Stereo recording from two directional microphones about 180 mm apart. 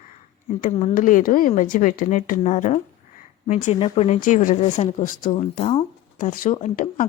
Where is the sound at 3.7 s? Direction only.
30° left (ahead or behind).